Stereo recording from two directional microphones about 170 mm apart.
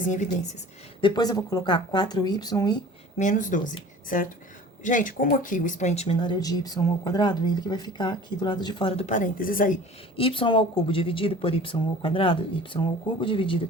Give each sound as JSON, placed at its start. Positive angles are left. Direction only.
{"t": 0.0, "sound": "a woman's voice", "side_deg": 45}
{"t": 1.0, "sound": "speech", "side_deg": 25}
{"t": 3.2, "sound": "speech", "side_deg": 50}
{"t": 6.1, "sound": "speech", "side_deg": 25}
{"t": 10.2, "sound": "speech", "side_deg": 30}